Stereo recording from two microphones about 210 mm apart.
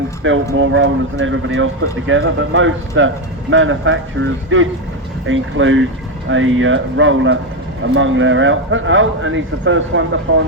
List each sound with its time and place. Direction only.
0.2 s speech: 65° right (ahead or behind)